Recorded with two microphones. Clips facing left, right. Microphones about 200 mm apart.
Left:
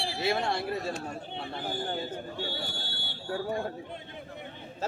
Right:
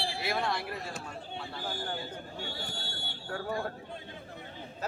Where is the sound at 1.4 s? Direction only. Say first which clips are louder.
Left 2 dB; 20° left (ahead or behind).